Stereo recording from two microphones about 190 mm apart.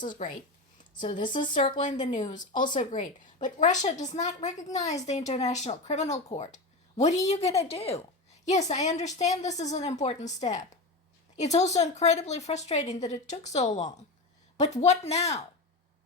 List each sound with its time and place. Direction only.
1.0 s speech: 25° left (ahead or behind)
1.8 s speech: 40° left (ahead or behind)